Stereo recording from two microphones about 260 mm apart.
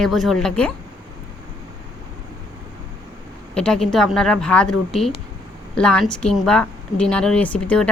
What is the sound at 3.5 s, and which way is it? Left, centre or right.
Speech, centre.